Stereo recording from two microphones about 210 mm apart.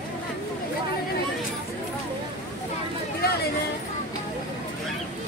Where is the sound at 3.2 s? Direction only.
45° left (ahead or behind).